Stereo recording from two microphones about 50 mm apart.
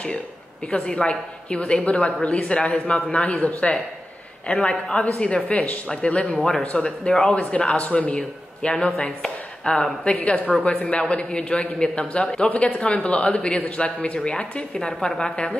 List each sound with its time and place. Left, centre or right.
0.7 s a woman's voice: centre